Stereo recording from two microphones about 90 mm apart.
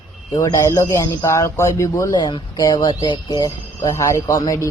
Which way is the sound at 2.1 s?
55° left (ahead or behind).